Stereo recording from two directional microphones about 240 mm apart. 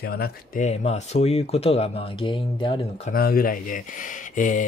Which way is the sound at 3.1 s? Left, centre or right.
Left.